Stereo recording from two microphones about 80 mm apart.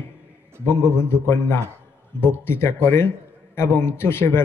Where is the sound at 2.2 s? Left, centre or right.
Left.